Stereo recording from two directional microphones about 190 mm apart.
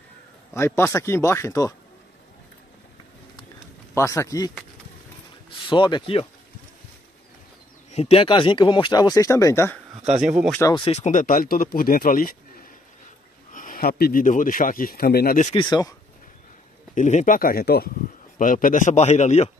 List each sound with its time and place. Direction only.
0.6 s speech: 15° left (ahead or behind)
3.9 s speech: 15° left (ahead or behind)
5.5 s speech: 25° left (ahead or behind)
7.9 s speech: 35° left (ahead or behind); by 9.8 s 15° left (ahead or behind)
10.2 s speech: centre (ahead or behind)
10.6 s speech: 25° left (ahead or behind); by 15.4 s 50° left (ahead or behind)
15.5 s speech: 25° left (ahead or behind)
16.9 s a man's voice: 40° left (ahead or behind)